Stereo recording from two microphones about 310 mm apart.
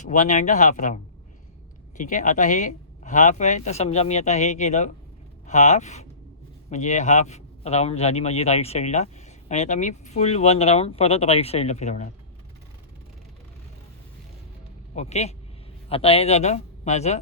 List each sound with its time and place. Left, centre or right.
0.0 s a man's voice: left
14.9 s a man's voice: left